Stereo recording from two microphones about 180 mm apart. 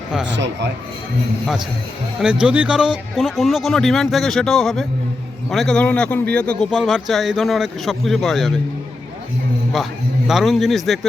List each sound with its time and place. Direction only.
0.3 s speech: 85° right
2.2 s a man's voice: 5° right (ahead or behind)
9.8 s a man's voice: centre (ahead or behind)